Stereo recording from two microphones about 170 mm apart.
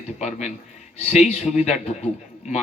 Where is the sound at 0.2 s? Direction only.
40° left (ahead or behind).